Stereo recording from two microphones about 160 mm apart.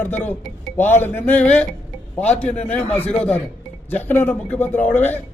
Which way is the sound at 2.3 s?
45° left (ahead or behind).